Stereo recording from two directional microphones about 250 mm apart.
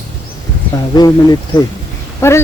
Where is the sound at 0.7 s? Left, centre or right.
Centre.